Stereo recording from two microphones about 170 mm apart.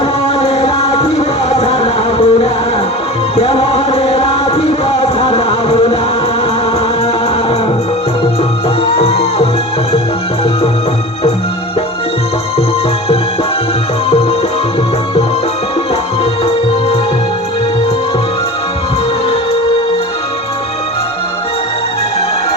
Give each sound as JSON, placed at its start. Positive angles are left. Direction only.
{"t": 0.3, "sound": "music", "side_deg": 35}
{"t": 9.0, "sound": "music", "side_deg": 35}